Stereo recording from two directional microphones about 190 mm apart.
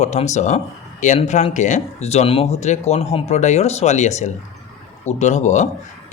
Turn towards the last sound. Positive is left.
turn(degrees=40)  # may be behind; listen again after turning